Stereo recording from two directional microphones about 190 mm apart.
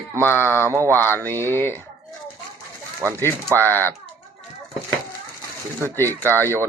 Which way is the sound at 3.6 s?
10° left (ahead or behind).